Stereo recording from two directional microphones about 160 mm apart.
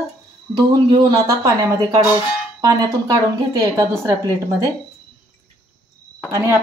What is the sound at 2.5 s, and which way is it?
Speech, 20° right (ahead or behind).